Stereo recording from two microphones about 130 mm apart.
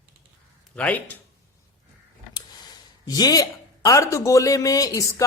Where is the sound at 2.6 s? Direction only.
30° left (ahead or behind).